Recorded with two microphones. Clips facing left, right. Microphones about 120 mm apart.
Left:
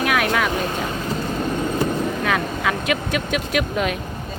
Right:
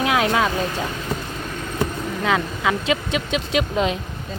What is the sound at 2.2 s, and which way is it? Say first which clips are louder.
Speech: right 1 dB; 20° right (ahead or behind).